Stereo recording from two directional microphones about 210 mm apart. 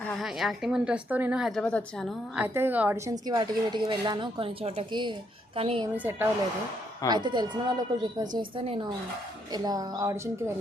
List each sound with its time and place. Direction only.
0.2 s speech: centre (ahead or behind)
2.3 s a woman's voice: 10° right (ahead or behind); by 5.9 s 25° right (ahead or behind)
6.0 s speech: 10° right (ahead or behind)
7.1 s a woman's voice: 20° right (ahead or behind)